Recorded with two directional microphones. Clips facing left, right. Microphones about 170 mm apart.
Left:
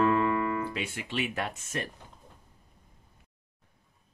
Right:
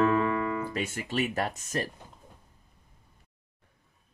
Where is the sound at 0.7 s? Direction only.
45° right (ahead or behind).